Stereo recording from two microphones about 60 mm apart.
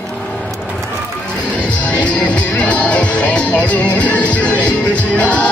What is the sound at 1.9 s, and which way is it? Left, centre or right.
Music, left.